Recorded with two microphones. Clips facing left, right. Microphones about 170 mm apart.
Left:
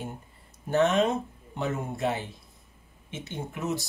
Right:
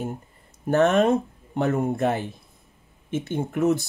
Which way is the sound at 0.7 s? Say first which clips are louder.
Right 5 dB; 50° right (ahead or behind).